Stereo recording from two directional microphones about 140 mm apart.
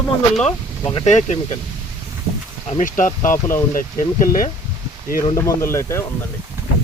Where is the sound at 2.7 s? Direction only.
65° left (ahead or behind).